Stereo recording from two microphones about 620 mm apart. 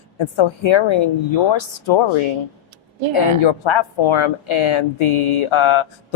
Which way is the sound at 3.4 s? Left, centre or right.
Left.